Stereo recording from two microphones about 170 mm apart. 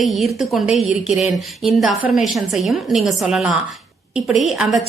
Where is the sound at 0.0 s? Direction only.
Centre (ahead or behind).